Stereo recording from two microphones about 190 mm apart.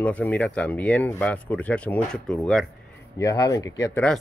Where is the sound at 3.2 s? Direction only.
20° left (ahead or behind).